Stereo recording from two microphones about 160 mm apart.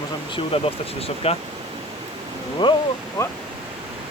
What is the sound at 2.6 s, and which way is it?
Speech, 30° left (ahead or behind).